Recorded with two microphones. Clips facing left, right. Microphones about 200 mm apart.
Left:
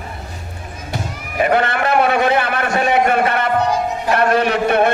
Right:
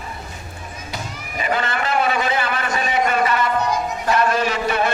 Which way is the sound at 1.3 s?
60° left (ahead or behind).